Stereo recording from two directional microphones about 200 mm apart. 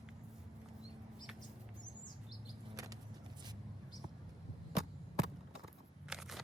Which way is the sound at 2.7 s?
15° right (ahead or behind).